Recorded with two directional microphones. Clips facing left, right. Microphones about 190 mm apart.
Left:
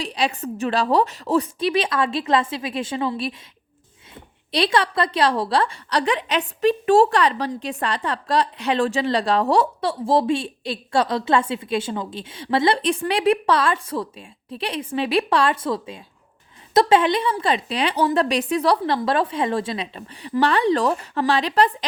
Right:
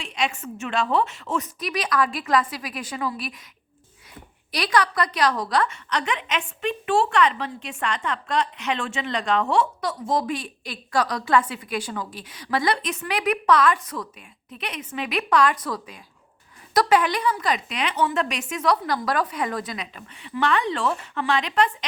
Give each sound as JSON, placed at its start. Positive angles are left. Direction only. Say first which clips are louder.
{"t": 0.0, "sound": "a woman's voice", "louder": "left 4 dB", "side_deg": 35}